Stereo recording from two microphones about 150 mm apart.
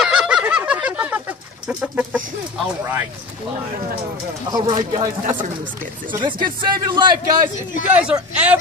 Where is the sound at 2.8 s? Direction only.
15° right (ahead or behind).